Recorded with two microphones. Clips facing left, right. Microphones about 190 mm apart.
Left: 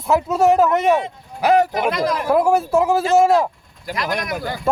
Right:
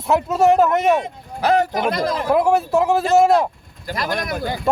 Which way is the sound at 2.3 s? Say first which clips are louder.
Even; centre (ahead or behind).